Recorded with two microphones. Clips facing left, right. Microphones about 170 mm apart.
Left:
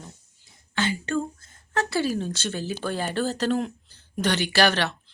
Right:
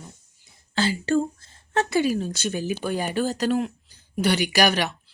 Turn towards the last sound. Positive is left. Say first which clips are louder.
# right 1 dB
turn(degrees=-10)  # may be behind; listen again after turning